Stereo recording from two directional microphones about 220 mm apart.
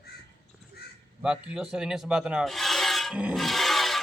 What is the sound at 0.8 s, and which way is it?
Crow, 45° left (ahead or behind).